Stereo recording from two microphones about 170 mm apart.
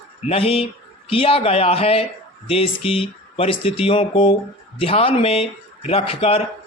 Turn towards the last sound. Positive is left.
turn(degrees=35)  # may be behind; listen again after turning